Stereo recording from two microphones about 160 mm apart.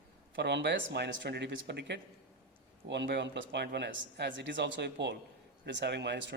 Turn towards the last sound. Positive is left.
turn(degrees=-90)